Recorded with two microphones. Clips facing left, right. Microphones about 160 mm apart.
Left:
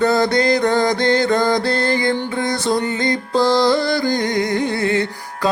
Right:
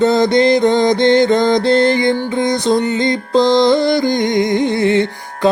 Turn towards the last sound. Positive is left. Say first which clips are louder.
# right 6 dB
turn(degrees=-20)  # may be behind; listen again after turning